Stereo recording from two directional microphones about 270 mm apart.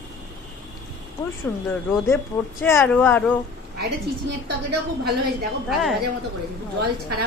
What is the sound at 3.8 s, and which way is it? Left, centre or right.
Speech, right.